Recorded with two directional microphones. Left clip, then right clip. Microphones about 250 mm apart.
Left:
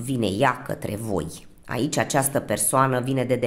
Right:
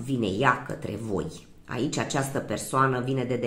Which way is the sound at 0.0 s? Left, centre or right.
Left.